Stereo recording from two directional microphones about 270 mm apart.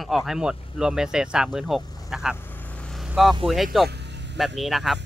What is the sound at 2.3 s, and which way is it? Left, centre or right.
Vehicle, centre.